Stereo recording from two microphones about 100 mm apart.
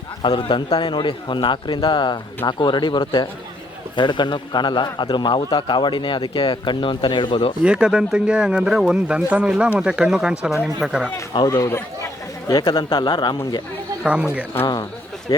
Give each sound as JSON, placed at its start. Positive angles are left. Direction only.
{"t": 0.2, "sound": "a man's voice", "side_deg": 55}
{"t": 7.6, "sound": "speech", "side_deg": -10}
{"t": 11.4, "sound": "chatter", "side_deg": 35}
{"t": 12.5, "sound": "a man's voice", "side_deg": 50}
{"t": 14.0, "sound": "speech", "side_deg": -10}
{"t": 15.3, "sound": "speech", "side_deg": 50}